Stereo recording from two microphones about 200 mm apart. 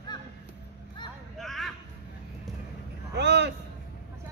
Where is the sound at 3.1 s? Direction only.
55° right (ahead or behind).